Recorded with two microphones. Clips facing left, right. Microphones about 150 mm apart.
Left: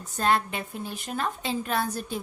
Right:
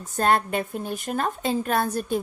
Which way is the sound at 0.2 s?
50° right (ahead or behind).